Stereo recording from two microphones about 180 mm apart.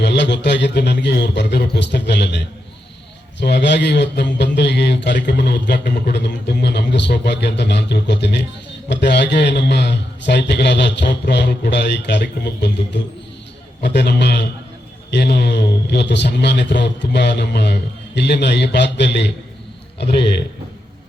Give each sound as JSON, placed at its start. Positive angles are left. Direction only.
{"t": 0.0, "sound": "speech", "side_deg": 70}
{"t": 3.4, "sound": "speech", "side_deg": 70}